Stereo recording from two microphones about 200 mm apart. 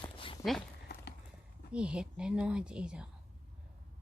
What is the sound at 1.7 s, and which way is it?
A woman's voice, 5° right (ahead or behind).